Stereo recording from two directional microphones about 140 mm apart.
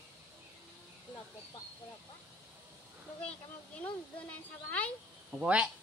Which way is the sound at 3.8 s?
10° left (ahead or behind).